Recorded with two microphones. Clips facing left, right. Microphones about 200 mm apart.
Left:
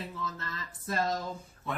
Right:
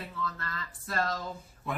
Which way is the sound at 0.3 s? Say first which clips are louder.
Right 1 dB; 20° left (ahead or behind).